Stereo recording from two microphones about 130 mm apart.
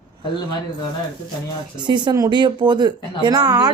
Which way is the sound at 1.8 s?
35° right (ahead or behind).